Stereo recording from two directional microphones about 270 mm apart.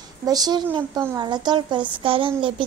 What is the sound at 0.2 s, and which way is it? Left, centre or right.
A child's voice, centre.